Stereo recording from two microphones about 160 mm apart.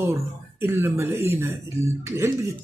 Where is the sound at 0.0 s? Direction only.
15° right (ahead or behind).